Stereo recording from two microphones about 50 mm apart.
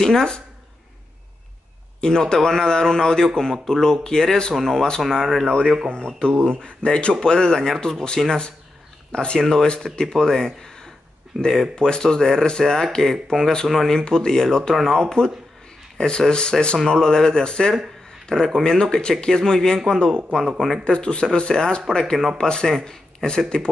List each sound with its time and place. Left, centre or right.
0.0 s speech: centre
2.0 s speech: centre
5.9 s speech: centre
13.9 s speech: centre
20.3 s speech: centre
20.8 s speech: centre